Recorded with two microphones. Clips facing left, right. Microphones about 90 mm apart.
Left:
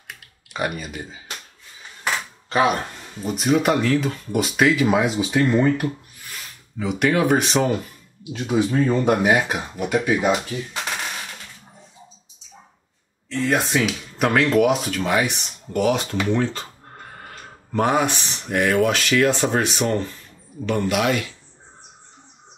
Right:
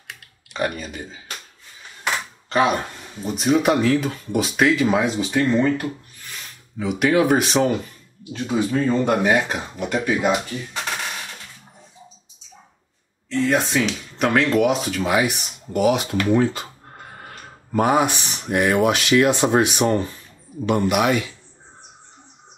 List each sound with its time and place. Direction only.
0.1 s typing: 5° left (ahead or behind)
3.2 s speech: centre (ahead or behind)
13.3 s speech: centre (ahead or behind)
16.3 s music: 10° right (ahead or behind)
17.7 s speech: 10° right (ahead or behind)